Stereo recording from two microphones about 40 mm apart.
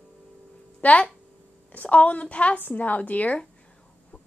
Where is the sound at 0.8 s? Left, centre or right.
Left.